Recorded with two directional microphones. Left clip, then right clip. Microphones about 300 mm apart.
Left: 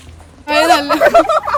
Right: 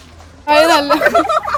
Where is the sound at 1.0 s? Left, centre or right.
Centre.